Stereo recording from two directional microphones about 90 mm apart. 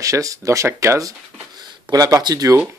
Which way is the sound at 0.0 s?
40° right (ahead or behind).